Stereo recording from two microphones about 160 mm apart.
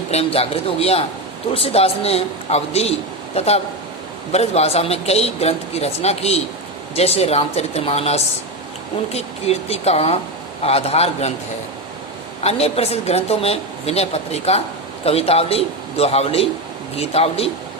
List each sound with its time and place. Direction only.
0.1 s a woman's voice: 40° left (ahead or behind)
12.4 s a woman's voice: 40° left (ahead or behind)